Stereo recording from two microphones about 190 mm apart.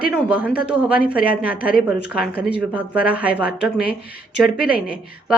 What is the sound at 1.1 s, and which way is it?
Speech, 50° left (ahead or behind).